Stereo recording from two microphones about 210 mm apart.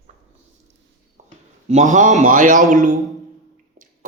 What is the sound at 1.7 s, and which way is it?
A man's voice, 35° right (ahead or behind).